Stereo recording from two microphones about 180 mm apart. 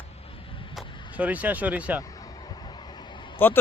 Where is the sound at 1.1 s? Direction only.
10° right (ahead or behind).